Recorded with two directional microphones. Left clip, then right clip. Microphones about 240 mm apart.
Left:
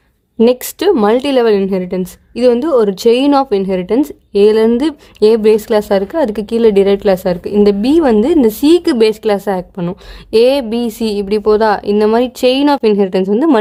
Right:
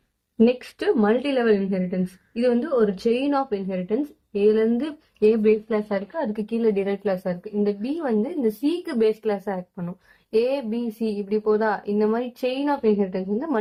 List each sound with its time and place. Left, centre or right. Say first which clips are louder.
0.3 s a woman's voice: left 10 dB; left
9.3 s a woman's voice: left 13 dB; left